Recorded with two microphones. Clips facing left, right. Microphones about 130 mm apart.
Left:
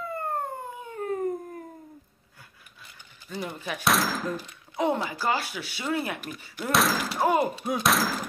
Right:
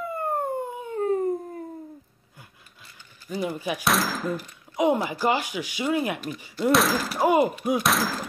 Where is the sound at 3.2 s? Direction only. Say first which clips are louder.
Right 6 dB; 15° right (ahead or behind).